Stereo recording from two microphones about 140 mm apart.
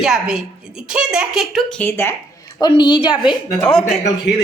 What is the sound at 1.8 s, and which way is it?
Speech, 15° left (ahead or behind).